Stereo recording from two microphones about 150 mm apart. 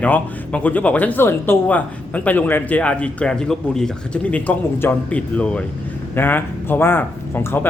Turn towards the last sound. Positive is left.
turn(degrees=15)  # may be behind; listen again after turning